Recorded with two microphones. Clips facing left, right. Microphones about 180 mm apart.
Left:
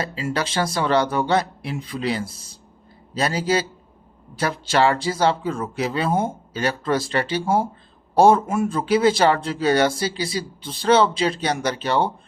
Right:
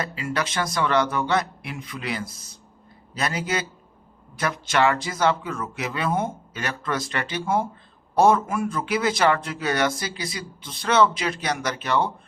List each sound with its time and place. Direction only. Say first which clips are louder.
0.0 s a man's voice: left 2 dB; 30° left (ahead or behind)